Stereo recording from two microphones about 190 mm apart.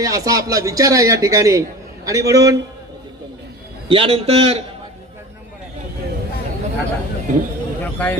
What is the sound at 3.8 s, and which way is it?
Speech, 30° right (ahead or behind).